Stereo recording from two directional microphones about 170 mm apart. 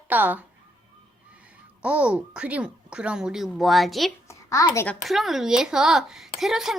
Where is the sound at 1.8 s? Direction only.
5° right (ahead or behind).